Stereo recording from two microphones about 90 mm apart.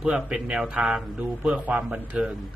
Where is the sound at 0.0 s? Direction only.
5° right (ahead or behind).